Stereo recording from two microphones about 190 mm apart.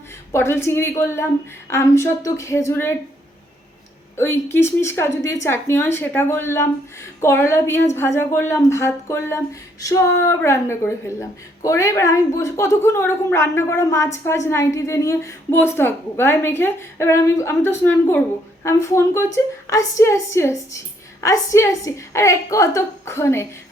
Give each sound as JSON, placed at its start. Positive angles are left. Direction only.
{"t": 0.3, "sound": "a woman's voice", "side_deg": 15}
{"t": 4.2, "sound": "a woman's voice", "side_deg": 10}